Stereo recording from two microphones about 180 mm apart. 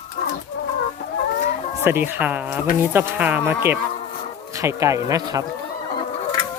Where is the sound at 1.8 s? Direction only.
10° right (ahead or behind).